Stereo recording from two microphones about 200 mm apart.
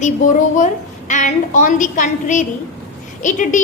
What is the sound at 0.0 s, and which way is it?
A woman's voice, 40° left (ahead or behind).